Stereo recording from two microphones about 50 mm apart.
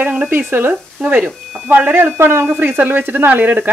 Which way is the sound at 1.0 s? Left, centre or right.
Right.